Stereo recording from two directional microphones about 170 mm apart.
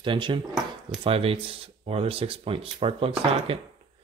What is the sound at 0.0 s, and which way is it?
Speech, 30° right (ahead or behind).